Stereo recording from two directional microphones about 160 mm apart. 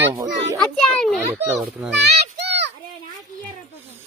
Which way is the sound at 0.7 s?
5° left (ahead or behind).